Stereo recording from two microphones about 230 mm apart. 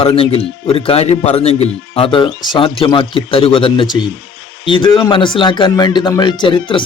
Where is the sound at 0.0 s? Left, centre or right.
Left.